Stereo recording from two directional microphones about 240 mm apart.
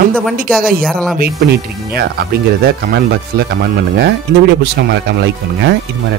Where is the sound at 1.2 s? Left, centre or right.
Right.